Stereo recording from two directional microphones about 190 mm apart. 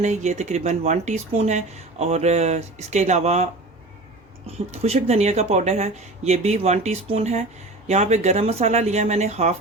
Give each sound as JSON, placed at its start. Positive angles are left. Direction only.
{"t": 0.0, "sound": "speech", "side_deg": -40}
{"t": 4.8, "sound": "speech", "side_deg": -35}